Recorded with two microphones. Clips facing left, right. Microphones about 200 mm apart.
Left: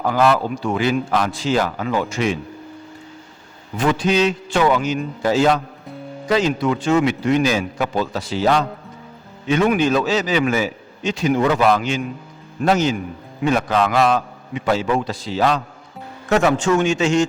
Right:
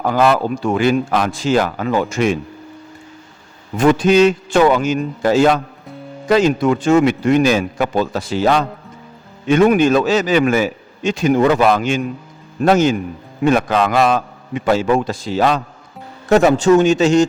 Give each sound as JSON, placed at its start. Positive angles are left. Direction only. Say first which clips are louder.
{"t": 0.0, "sound": "speech", "louder": "right 2 dB", "side_deg": -50}
{"t": 3.8, "sound": "speech", "louder": "right 6 dB", "side_deg": -50}
{"t": 16.3, "sound": "a man's voice", "louder": "right 5 dB", "side_deg": -35}